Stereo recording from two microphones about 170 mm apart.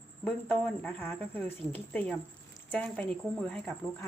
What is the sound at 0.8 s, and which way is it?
Speech, 10° left (ahead or behind).